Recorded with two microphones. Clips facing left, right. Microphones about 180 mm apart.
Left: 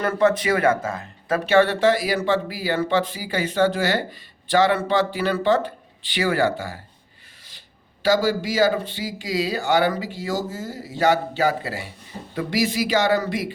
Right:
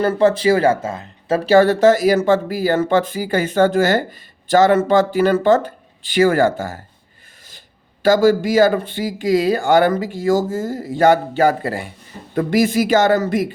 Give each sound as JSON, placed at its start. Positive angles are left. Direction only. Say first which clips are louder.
{"t": 0.0, "sound": "speech", "louder": "right 5 dB", "side_deg": -30}
{"t": 1.5, "sound": "speech", "louder": "right 5 dB", "side_deg": -40}
{"t": 8.0, "sound": "speech", "louder": "right 7 dB", "side_deg": -50}